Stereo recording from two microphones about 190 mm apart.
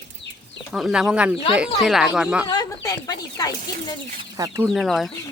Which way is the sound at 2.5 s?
20° left (ahead or behind).